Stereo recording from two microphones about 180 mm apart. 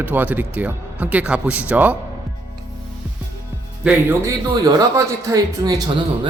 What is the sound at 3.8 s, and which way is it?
A man's voice, 10° right (ahead or behind).